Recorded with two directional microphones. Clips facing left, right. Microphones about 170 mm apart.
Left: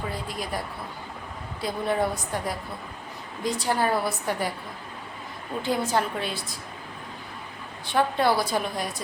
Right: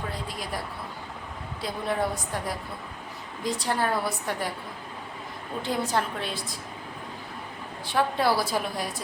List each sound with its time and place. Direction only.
0.3 s a woman's voice: centre (ahead or behind)
1.6 s a woman's voice: centre (ahead or behind)
5.6 s a woman's voice: centre (ahead or behind)
7.9 s a woman's voice: 5° right (ahead or behind)